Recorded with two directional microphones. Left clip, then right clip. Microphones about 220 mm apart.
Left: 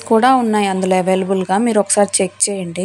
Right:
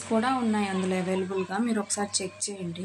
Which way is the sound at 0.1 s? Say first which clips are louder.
Left 14 dB; 40° left (ahead or behind).